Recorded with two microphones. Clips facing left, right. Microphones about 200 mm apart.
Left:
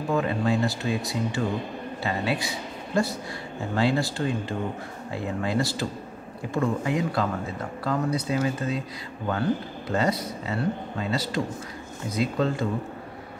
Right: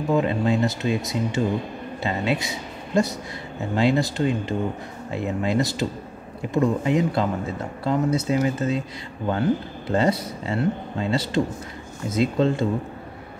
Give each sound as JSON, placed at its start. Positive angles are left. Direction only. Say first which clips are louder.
{"t": 0.1, "sound": "a man's voice", "louder": "right 3 dB", "side_deg": -20}
{"t": 9.9, "sound": "speech", "louder": "right 4 dB", "side_deg": -30}